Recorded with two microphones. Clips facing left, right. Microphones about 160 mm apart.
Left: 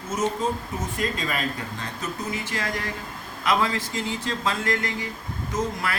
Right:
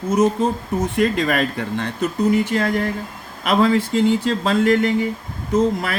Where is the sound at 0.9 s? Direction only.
70° right (ahead or behind).